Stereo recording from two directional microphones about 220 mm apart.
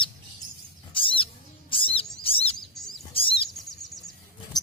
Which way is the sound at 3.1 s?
25° left (ahead or behind).